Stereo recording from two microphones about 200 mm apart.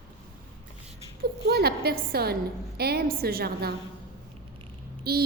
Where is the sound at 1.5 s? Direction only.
50° right (ahead or behind).